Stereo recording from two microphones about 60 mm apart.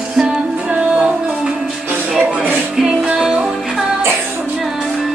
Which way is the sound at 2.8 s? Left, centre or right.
Centre.